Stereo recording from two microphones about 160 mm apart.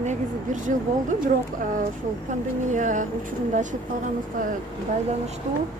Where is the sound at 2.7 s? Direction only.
50° right (ahead or behind).